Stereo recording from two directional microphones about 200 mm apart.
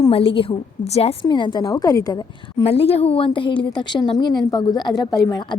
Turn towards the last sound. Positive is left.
turn(degrees=20)  # may be behind; listen again after turning